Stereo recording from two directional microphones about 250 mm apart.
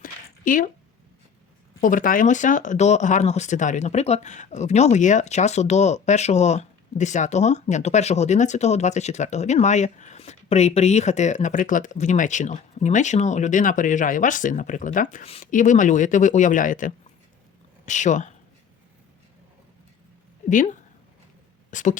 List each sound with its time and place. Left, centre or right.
0.0 s a sound: left
1.8 s speech: left
20.5 s speech: left